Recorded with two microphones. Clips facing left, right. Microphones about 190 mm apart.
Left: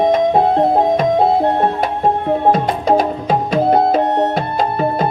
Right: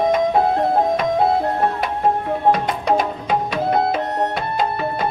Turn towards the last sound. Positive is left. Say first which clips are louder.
# left 5 dB
turn(degrees=40)  # may be behind; listen again after turning